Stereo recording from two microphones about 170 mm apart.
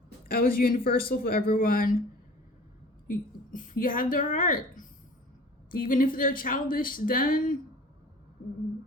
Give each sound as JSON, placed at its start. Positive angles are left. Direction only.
{"t": 0.3, "sound": "speech", "side_deg": 60}
{"t": 3.1, "sound": "a woman's voice", "side_deg": 50}